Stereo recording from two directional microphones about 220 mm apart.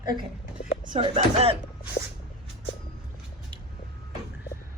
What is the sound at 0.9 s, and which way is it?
Speech, 30° right (ahead or behind).